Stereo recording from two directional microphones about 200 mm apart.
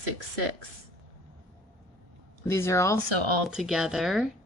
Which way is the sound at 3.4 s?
Centre (ahead or behind).